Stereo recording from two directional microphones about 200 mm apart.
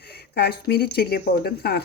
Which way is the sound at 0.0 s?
55° left (ahead or behind).